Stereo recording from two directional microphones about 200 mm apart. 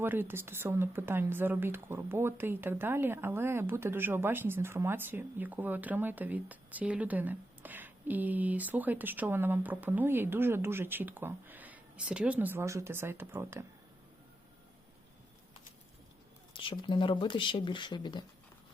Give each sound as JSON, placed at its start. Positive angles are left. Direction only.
{"t": 0.0, "sound": "speech", "side_deg": -10}
{"t": 16.5, "sound": "speech", "side_deg": 25}